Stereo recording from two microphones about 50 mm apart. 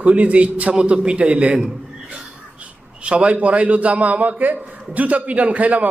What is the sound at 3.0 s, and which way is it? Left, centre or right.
A man's voice, right.